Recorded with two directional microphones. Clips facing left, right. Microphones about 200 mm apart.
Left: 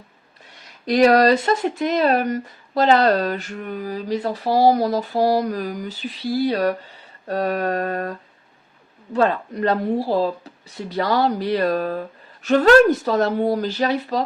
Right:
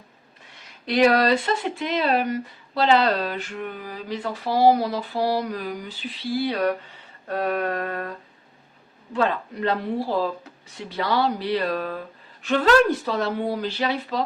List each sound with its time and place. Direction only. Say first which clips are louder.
0.9 s speech: left 4 dB; 40° left (ahead or behind)
9.1 s speech: left 4 dB; 45° left (ahead or behind)